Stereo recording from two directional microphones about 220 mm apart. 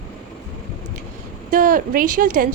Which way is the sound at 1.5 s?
40° right (ahead or behind).